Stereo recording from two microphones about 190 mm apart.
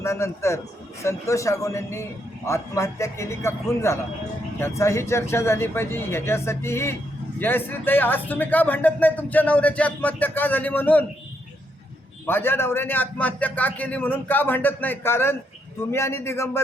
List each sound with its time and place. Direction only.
0.0 s speech: 15° left (ahead or behind)
12.2 s speech: 10° left (ahead or behind)